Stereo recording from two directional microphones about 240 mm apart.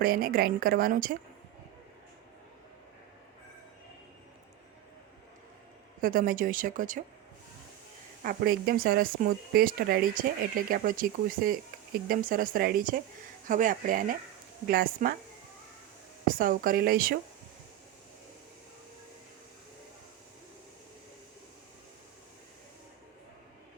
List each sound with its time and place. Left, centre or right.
0.0 s speech: right
6.0 s speech: right
8.2 s speech: right
16.2 s speech: right